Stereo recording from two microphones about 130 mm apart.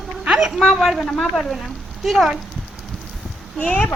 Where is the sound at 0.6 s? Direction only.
Centre (ahead or behind).